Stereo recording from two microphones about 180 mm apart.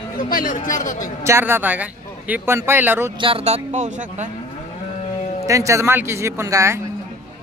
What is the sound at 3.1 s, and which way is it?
Speech, 30° right (ahead or behind).